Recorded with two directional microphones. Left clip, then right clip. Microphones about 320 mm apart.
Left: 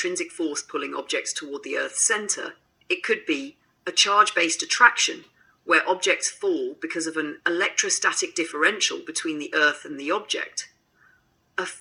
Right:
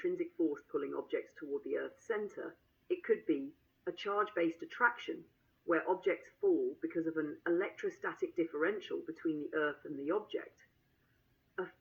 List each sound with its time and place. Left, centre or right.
0.0 s speech: left